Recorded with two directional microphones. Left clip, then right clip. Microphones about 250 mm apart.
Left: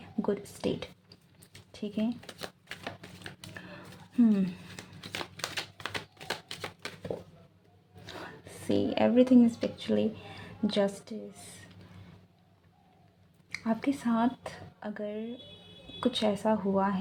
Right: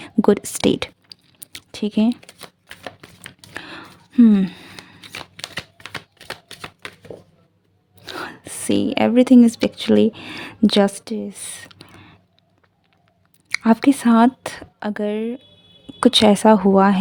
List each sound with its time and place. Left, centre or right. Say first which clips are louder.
0.0 s computer keyboard: right 16 dB; right
3.5 s a sound: right 12 dB; right
8.0 s speech: right 13 dB; right
13.5 s speech: right 15 dB; right